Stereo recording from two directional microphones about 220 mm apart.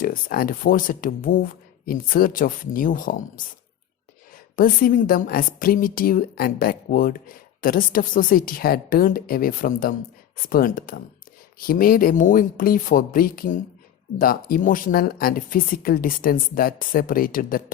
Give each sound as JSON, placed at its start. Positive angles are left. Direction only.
{"t": 0.0, "sound": "speech", "side_deg": 40}
{"t": 4.5, "sound": "speech", "side_deg": 40}